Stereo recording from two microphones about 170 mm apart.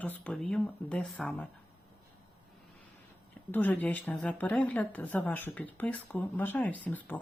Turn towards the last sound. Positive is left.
turn(degrees=10)  # may be behind; listen again after turning